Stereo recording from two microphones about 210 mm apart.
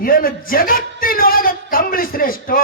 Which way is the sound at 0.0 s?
45° left (ahead or behind).